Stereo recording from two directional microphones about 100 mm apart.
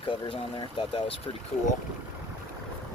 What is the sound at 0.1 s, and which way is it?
Speech, 55° left (ahead or behind).